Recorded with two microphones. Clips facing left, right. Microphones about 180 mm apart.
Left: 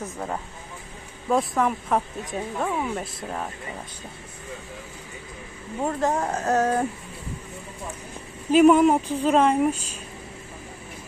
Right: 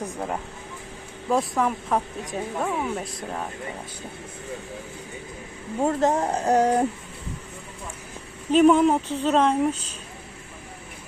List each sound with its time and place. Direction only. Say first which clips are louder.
0.0 s speech: right 2 dB; 15° right (ahead or behind)
1.3 s speech: left 1 dB; centre (ahead or behind)
5.8 s speech: right 3 dB; 30° right (ahead or behind)
8.5 s speech: left 1 dB; 5° left (ahead or behind)